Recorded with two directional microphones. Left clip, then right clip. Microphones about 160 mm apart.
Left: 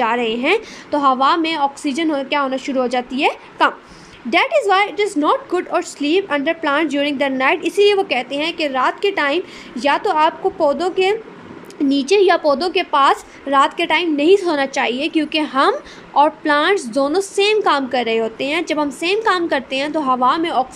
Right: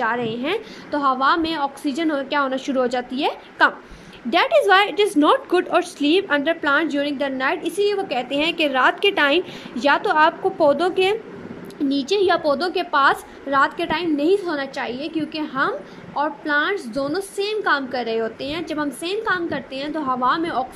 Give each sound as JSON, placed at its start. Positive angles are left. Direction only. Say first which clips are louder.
{"t": 0.0, "sound": "a woman's voice", "louder": "left 5 dB", "side_deg": 10}